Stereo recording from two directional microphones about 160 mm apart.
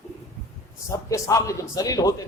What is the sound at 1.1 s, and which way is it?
A man's voice, 20° left (ahead or behind).